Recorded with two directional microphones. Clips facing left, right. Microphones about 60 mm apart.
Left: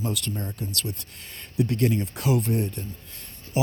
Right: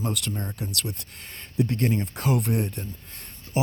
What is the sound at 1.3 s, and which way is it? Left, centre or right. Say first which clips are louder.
Speech: even; right.